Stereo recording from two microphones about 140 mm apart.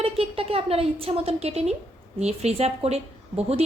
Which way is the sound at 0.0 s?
45° right (ahead or behind).